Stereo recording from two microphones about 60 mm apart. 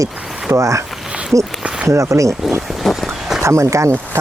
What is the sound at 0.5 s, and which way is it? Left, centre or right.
Speech, right.